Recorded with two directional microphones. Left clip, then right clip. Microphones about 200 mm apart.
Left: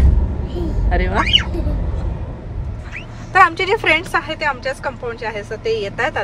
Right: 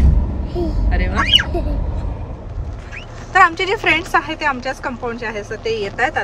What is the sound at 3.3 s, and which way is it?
Speech, 5° right (ahead or behind).